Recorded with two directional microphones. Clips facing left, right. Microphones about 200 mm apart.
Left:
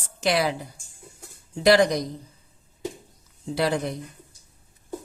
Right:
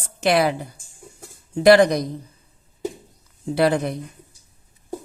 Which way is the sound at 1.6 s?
55° right (ahead or behind).